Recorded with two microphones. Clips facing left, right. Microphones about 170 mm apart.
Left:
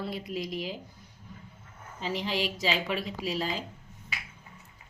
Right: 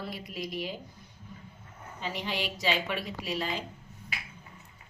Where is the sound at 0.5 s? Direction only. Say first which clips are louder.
Left 1 dB; centre (ahead or behind).